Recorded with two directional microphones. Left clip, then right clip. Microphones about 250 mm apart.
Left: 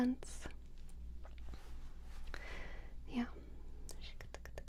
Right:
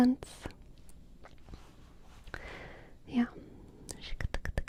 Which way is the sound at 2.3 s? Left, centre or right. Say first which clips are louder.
Right 6 dB; right.